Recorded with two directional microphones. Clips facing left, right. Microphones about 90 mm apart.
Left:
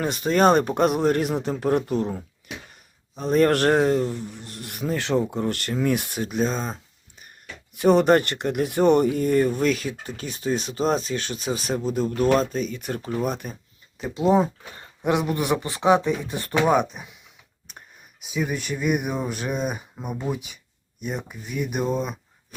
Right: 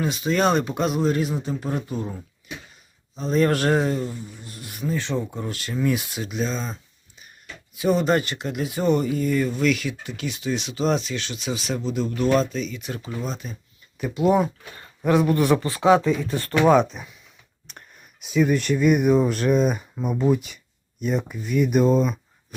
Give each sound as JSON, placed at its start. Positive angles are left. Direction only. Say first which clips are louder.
{"t": 0.0, "sound": "speech", "louder": "left 2 dB", "side_deg": 50}
{"t": 7.8, "sound": "speech", "louder": "left 4 dB", "side_deg": 60}
{"t": 9.1, "sound": "speech", "louder": "left 2 dB", "side_deg": 50}
{"t": 9.6, "sound": "speech", "louder": "right 1 dB", "side_deg": 35}
{"t": 14.0, "sound": "speech", "louder": "even", "side_deg": 25}